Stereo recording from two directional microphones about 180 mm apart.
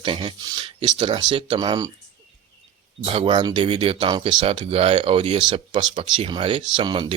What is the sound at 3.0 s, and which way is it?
Speech, 30° right (ahead or behind).